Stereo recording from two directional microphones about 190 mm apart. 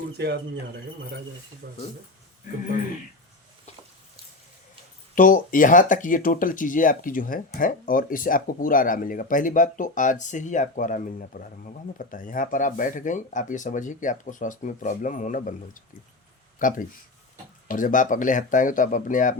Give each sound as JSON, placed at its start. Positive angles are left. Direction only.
{"t": 0.2, "sound": "speech", "side_deg": -60}
{"t": 1.6, "sound": "speech", "side_deg": -60}
{"t": 5.1, "sound": "speech", "side_deg": 45}